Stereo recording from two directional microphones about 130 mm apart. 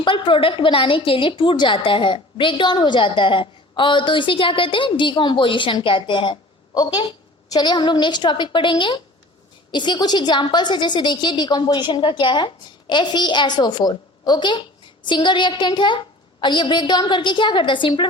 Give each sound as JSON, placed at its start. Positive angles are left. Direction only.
{"t": 0.0, "sound": "a woman's voice", "side_deg": 40}